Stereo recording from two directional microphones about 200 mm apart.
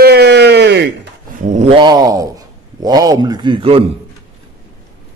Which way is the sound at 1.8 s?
20° right (ahead or behind).